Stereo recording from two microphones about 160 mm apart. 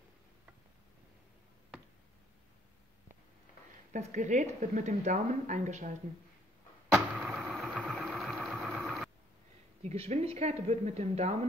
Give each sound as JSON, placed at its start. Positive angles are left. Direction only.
{"t": 3.9, "sound": "a woman's voice", "side_deg": -50}
{"t": 6.9, "sound": "a sound", "side_deg": -5}
{"t": 7.7, "sound": "vehicle", "side_deg": 0}
{"t": 9.8, "sound": "a woman's voice", "side_deg": -40}